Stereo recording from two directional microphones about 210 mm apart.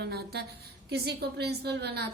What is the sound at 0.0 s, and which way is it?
A woman's voice, 50° right (ahead or behind).